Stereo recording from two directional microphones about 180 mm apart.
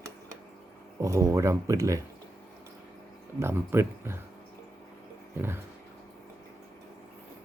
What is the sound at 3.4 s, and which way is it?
Speech, 15° right (ahead or behind).